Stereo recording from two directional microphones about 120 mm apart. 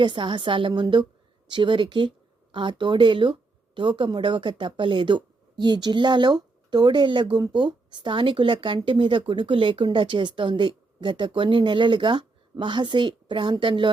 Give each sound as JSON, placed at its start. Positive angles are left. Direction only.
{"t": 0.0, "sound": "speech", "side_deg": -40}